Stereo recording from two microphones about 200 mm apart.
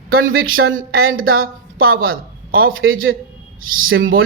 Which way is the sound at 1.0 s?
90° right.